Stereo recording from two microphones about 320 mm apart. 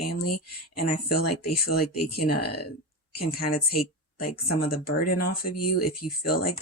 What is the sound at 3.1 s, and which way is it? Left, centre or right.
A woman's voice, left.